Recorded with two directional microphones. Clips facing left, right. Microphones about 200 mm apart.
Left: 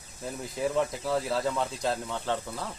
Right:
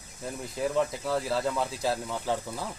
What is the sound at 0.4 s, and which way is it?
Speech, centre (ahead or behind).